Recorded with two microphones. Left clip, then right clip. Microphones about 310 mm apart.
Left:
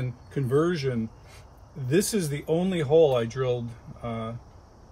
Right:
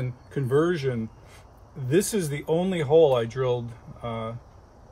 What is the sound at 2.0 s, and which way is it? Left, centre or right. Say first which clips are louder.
Speech: right 1 dB; centre.